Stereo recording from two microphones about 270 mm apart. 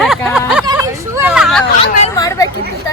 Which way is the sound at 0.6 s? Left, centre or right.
Centre.